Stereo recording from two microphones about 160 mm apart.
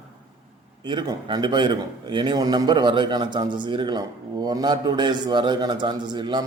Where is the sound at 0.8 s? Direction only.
30° right (ahead or behind).